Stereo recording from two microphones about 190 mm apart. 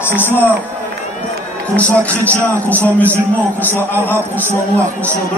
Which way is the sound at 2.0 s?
10° left (ahead or behind).